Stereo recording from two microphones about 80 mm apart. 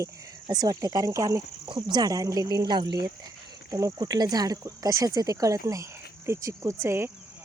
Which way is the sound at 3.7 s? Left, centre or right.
Right.